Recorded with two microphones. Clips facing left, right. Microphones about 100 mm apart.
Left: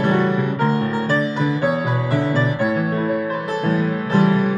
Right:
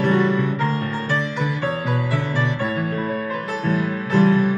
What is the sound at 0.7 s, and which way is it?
Music, 15° left (ahead or behind).